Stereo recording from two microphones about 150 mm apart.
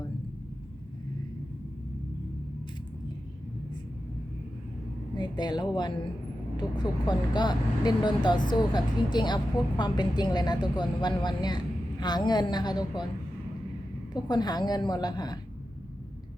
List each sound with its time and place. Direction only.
5.1 s a woman's voice: 30° left (ahead or behind)
14.1 s a woman's voice: 30° left (ahead or behind)